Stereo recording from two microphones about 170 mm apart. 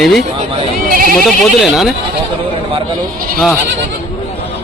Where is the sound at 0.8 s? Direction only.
55° right (ahead or behind).